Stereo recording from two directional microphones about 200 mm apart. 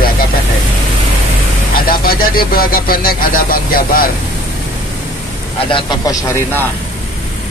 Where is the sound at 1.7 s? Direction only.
45° left (ahead or behind).